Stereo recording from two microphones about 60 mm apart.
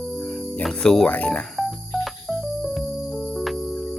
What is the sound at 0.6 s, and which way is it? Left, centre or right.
Speech, centre.